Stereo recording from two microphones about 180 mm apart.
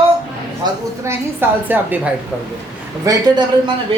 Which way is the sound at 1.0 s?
15° right (ahead or behind).